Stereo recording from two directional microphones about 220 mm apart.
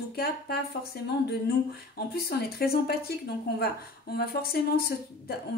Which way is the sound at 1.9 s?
45° left (ahead or behind).